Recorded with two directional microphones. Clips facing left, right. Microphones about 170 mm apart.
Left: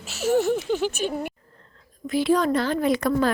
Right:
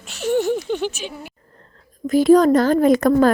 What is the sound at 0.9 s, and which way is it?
Speech, 50° left (ahead or behind).